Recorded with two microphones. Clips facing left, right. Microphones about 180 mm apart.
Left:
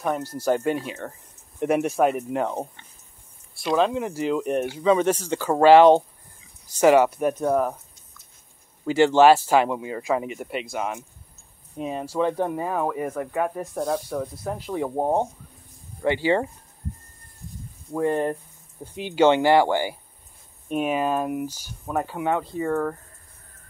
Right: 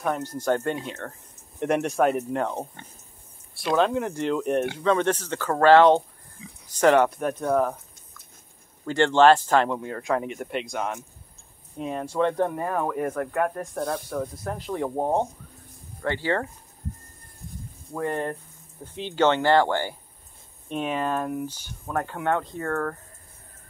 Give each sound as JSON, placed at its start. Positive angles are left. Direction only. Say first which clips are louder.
{"t": 0.4, "sound": "speech", "louder": "left 4 dB", "side_deg": 10}
{"t": 8.8, "sound": "speech", "louder": "left 2 dB", "side_deg": 10}
{"t": 17.9, "sound": "speech", "louder": "left 5 dB", "side_deg": 15}